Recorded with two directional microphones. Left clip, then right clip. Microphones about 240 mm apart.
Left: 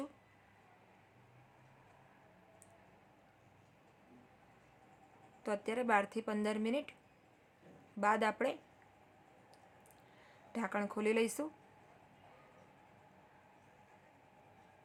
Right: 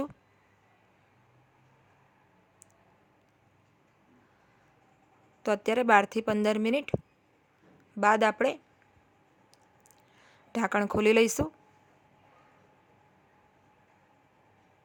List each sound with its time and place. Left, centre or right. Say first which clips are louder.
5.4 s speech: right 11 dB; right
8.0 s speech: right 9 dB; right
10.2 s speech: right 11 dB; right